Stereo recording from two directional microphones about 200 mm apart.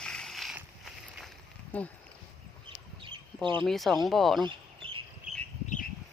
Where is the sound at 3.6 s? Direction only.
Centre (ahead or behind).